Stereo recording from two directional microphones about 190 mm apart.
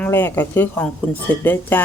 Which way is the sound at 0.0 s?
10° left (ahead or behind).